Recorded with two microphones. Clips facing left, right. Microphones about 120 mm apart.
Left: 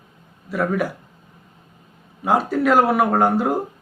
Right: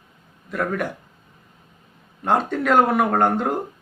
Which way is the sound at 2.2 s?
5° left (ahead or behind).